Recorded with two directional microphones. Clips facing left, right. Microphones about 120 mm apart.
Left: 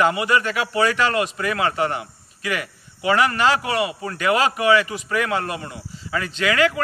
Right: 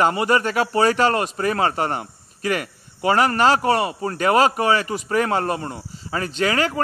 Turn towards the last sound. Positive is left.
turn(degrees=-35)  # may be behind; listen again after turning